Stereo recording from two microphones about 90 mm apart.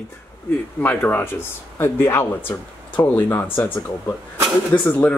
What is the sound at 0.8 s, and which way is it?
Speech, 20° left (ahead or behind).